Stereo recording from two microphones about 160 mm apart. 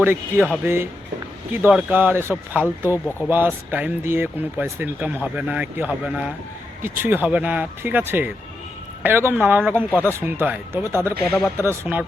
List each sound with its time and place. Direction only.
0.0 s speech: 10° right (ahead or behind)